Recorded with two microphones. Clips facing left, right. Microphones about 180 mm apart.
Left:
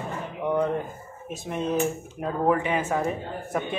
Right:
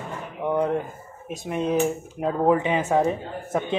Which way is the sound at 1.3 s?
10° right (ahead or behind).